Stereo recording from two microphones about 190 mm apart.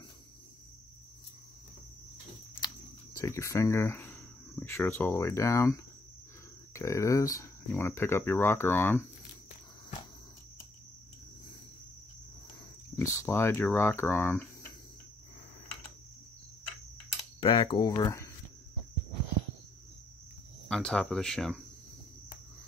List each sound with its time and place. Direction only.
3.2 s speech: 15° left (ahead or behind)
13.0 s speech: 15° left (ahead or behind)
17.4 s speech: 25° left (ahead or behind)
20.6 s speech: 5° left (ahead or behind)